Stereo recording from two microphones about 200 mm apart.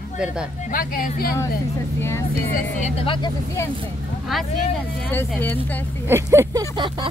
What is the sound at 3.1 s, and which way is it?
Speech, 20° left (ahead or behind).